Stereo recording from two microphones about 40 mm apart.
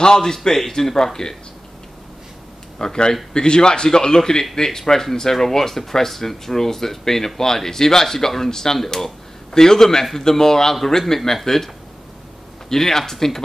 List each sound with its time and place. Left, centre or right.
0.0 s speech: centre
2.8 s speech: centre